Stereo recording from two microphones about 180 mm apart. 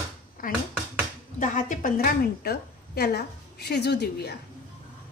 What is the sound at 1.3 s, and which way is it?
A woman's voice, 45° left (ahead or behind).